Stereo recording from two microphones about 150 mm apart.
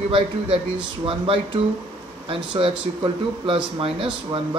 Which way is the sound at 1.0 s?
40° right (ahead or behind).